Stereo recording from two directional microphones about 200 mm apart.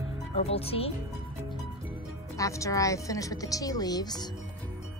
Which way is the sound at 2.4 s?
15° left (ahead or behind).